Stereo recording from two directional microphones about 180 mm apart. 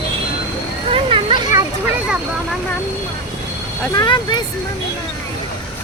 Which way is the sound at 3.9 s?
25° left (ahead or behind).